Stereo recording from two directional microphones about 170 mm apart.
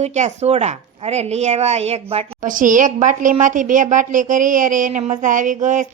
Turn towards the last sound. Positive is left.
turn(degrees=-50)  # may be behind; listen again after turning